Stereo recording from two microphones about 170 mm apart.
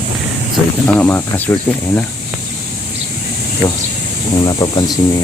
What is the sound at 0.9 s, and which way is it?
Speech, 10° left (ahead or behind).